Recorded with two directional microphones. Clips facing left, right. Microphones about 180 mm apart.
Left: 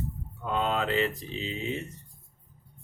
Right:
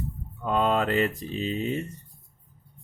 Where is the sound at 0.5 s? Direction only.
50° right (ahead or behind).